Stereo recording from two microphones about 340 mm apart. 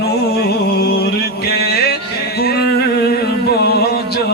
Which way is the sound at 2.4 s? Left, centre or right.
Left.